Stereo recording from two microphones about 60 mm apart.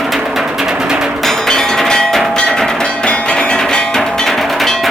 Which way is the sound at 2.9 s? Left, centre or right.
Centre.